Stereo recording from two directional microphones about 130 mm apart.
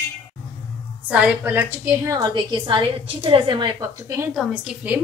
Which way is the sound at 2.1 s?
35° right (ahead or behind).